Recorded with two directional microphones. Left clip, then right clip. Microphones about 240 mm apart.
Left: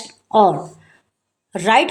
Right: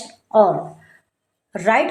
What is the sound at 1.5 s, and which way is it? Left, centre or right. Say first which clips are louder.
Speech: left 2 dB; left.